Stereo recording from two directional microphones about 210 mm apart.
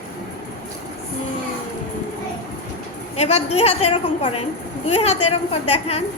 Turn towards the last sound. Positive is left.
turn(degrees=30)  # may be behind; listen again after turning